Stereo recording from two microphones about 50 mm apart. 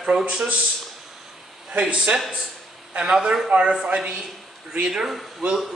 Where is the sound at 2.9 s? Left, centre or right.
Centre.